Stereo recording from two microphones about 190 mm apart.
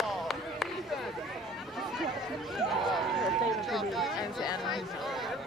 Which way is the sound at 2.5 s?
Centre (ahead or behind).